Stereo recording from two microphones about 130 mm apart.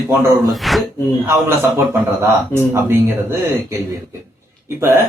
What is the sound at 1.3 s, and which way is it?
Speech, 20° right (ahead or behind).